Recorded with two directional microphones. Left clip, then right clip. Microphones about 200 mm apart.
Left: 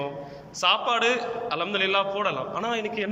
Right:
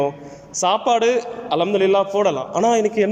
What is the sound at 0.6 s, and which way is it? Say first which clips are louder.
A man's voice: right 5 dB; 30° right (ahead or behind).